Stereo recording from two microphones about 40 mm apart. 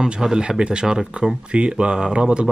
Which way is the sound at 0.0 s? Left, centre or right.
Centre.